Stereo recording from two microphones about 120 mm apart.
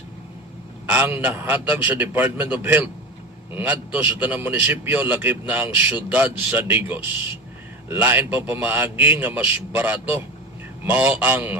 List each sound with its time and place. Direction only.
0.9 s a man's voice: 15° right (ahead or behind)